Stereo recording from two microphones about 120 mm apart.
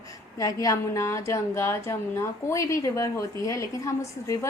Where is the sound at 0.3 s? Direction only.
30° left (ahead or behind).